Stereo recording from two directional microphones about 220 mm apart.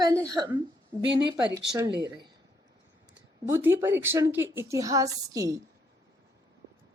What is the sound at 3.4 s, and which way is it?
A woman's voice, 10° right (ahead or behind).